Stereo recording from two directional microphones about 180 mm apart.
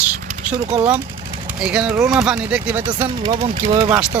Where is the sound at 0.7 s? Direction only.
5° right (ahead or behind).